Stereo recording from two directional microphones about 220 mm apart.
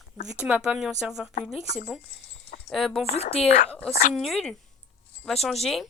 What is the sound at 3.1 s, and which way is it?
Speech, 30° left (ahead or behind).